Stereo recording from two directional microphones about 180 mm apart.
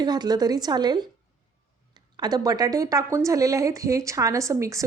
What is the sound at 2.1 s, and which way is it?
A woman's voice, 20° right (ahead or behind).